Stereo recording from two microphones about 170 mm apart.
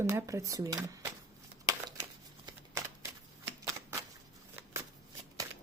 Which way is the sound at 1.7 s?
20° right (ahead or behind).